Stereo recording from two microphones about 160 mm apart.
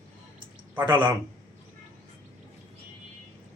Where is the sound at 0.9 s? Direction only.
25° right (ahead or behind).